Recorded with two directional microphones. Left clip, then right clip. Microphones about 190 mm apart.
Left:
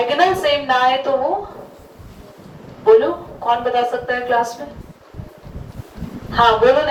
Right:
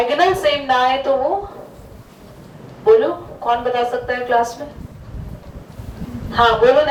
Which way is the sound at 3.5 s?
15° left (ahead or behind).